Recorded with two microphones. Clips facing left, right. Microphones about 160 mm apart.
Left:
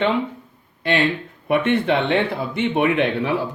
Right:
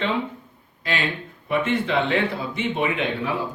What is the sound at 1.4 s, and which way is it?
Speech, 65° left (ahead or behind).